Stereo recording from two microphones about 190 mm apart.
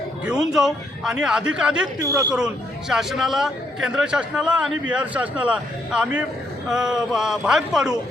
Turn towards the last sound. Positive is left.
turn(degrees=-5)  # may be behind; listen again after turning